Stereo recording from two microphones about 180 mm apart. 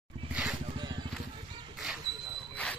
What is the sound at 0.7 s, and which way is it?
Vehicle, 25° right (ahead or behind).